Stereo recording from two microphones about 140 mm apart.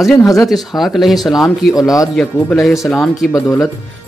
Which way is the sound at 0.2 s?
25° left (ahead or behind).